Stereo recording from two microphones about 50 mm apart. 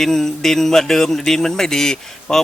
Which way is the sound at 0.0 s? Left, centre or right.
Centre.